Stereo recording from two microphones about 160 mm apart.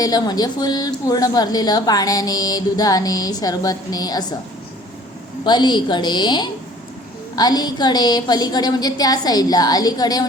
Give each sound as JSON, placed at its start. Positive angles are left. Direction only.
{"t": 0.0, "sound": "a woman's voice", "side_deg": 25}
{"t": 5.5, "sound": "a woman's voice", "side_deg": 30}